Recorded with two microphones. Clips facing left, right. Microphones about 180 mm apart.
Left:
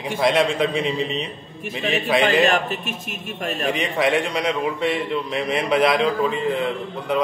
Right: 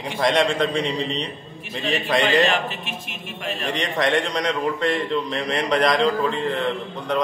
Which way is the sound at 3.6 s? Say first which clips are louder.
Left 2 dB; 5° left (ahead or behind).